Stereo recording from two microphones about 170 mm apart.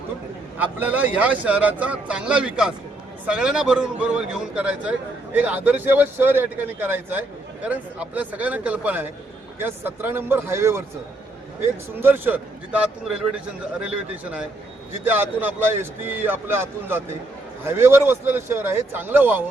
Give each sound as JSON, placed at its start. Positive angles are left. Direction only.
{"t": 0.6, "sound": "a man's voice", "side_deg": -10}
{"t": 11.9, "sound": "a man's voice", "side_deg": -10}